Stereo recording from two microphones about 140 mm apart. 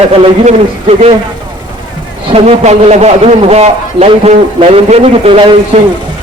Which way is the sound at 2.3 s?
50° right (ahead or behind).